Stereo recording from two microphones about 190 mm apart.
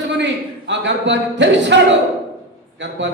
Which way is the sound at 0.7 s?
70° right (ahead or behind).